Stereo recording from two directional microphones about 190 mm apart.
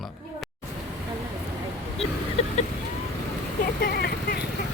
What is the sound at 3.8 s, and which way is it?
Speech, 55° left (ahead or behind).